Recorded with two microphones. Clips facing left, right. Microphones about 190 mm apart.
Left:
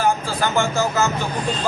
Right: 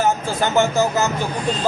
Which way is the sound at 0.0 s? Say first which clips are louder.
Right 1 dB; 20° right (ahead or behind).